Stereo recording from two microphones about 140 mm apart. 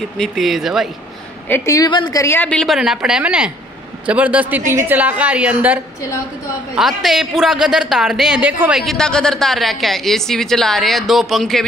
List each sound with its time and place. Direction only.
0.2 s a man's voice: centre (ahead or behind)
1.5 s a woman's voice: 25° left (ahead or behind)
2.2 s a man's voice: 15° left (ahead or behind)